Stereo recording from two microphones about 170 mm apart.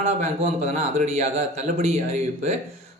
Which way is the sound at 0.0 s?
40° right (ahead or behind).